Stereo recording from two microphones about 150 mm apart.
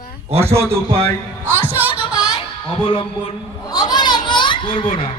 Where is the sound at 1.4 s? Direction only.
15° right (ahead or behind).